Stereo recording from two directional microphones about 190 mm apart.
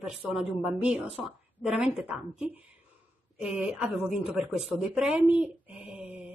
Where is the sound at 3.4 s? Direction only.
5° right (ahead or behind).